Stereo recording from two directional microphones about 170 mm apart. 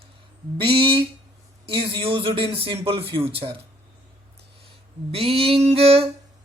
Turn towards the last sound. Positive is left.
turn(degrees=-35)  # may be behind; listen again after turning